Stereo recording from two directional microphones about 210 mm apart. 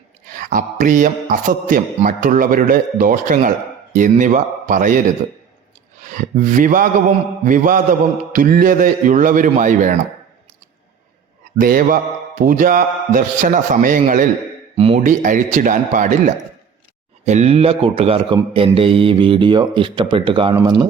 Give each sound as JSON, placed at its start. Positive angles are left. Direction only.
{"t": 0.3, "sound": "speech", "side_deg": -40}
{"t": 6.1, "sound": "speech", "side_deg": -40}
{"t": 11.5, "sound": "speech", "side_deg": -40}